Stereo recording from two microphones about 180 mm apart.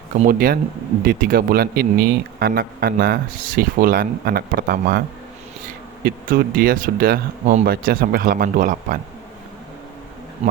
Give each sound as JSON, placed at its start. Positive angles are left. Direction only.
{"t": 0.3, "sound": "speech", "side_deg": -55}